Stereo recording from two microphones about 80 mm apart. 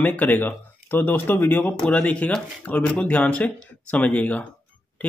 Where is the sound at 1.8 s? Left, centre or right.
Centre.